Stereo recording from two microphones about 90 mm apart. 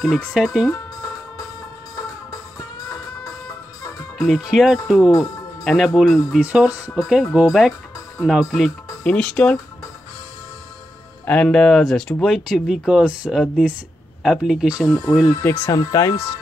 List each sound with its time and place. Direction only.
0.3 s speech: 5° right (ahead or behind)
4.2 s speech: 5° right (ahead or behind)
5.2 s music: centre (ahead or behind)
5.9 s speech: centre (ahead or behind)
6.4 s speech: 15° right (ahead or behind)
9.0 s speech: 10° left (ahead or behind)
11.2 s speech: 10° left (ahead or behind); by 14.9 s 10° right (ahead or behind)
15.4 s speech: 25° left (ahead or behind)
15.7 s speech: 45° left (ahead or behind)